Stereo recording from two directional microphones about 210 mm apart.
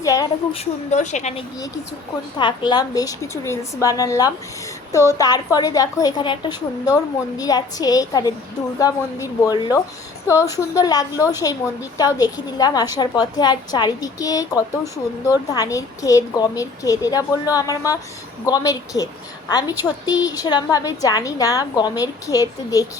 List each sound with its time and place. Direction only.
0.0 s a sound: 15° left (ahead or behind)
0.6 s a woman's voice: 35° left (ahead or behind)
2.4 s a woman's voice: 20° left (ahead or behind)